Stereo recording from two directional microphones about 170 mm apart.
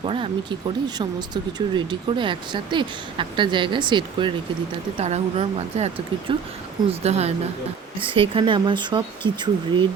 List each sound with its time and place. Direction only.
0.0 s speech: 30° right (ahead or behind)